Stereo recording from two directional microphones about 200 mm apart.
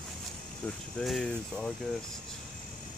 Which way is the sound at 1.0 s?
Centre (ahead or behind).